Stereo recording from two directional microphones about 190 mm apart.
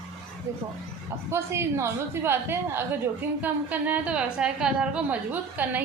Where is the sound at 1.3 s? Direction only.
15° right (ahead or behind).